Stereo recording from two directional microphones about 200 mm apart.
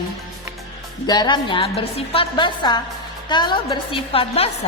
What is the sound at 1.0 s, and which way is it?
A woman's voice, 20° left (ahead or behind).